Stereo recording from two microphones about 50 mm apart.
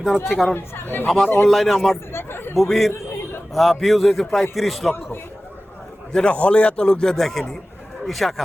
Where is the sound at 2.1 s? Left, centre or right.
Left.